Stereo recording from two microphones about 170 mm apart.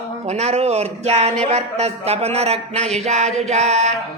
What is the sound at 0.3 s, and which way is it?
Speech, 40° right (ahead or behind).